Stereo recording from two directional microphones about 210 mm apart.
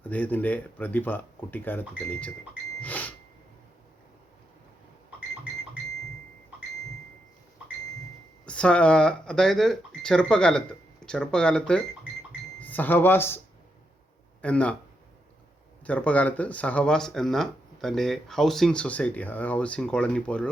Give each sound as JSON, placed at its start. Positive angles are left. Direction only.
{"t": 0.0, "sound": "speech", "side_deg": 10}
{"t": 8.4, "sound": "speech", "side_deg": 5}
{"t": 14.4, "sound": "speech", "side_deg": 5}
{"t": 15.8, "sound": "speech", "side_deg": 5}